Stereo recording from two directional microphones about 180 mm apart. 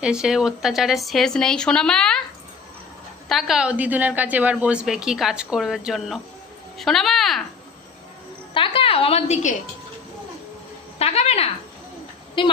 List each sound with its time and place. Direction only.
0.0 s a woman's voice: 5° right (ahead or behind)
3.2 s a woman's voice: centre (ahead or behind)
8.5 s a woman's voice: 30° left (ahead or behind)
11.0 s a woman's voice: 35° left (ahead or behind)